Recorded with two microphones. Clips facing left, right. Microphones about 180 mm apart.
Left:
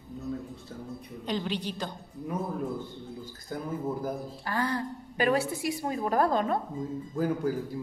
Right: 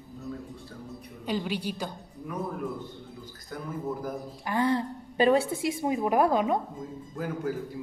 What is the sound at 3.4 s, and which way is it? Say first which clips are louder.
Speech: left 1 dB; 30° left (ahead or behind).